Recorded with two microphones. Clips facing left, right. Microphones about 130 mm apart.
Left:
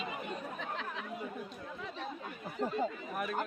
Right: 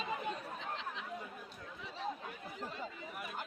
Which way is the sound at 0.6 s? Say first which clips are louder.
Left 3 dB; 55° left (ahead or behind).